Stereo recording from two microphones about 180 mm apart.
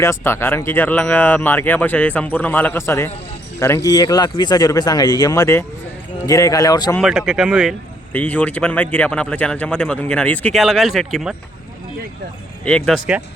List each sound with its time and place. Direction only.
0.0 s speech: 15° left (ahead or behind)
7.0 s speech: centre (ahead or behind)
8.1 s speech: 5° left (ahead or behind)
12.6 s speech: 5° left (ahead or behind)